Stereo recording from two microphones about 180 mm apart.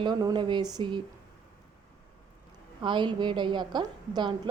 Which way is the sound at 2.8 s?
25° right (ahead or behind).